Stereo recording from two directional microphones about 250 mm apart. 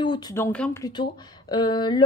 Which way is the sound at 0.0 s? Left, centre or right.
Centre.